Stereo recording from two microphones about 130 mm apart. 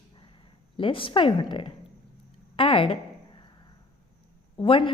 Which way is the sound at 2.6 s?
45° left (ahead or behind).